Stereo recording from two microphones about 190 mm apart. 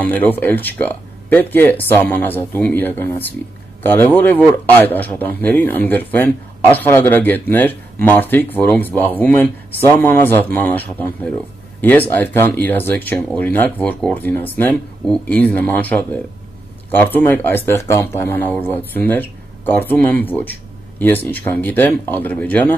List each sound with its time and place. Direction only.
0.0 s speech: 10° left (ahead or behind)